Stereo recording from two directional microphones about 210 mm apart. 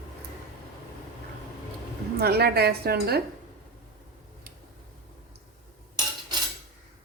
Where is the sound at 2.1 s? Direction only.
50° right (ahead or behind).